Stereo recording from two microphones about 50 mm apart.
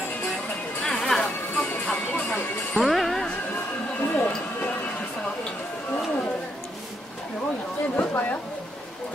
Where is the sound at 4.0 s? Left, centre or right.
Left.